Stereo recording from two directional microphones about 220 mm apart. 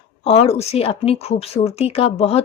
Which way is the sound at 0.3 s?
30° left (ahead or behind).